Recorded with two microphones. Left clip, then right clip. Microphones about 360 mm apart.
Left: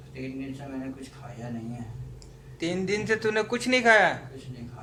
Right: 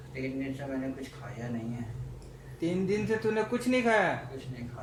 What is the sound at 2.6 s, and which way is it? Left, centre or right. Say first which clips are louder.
A man's voice: left 2 dB; left.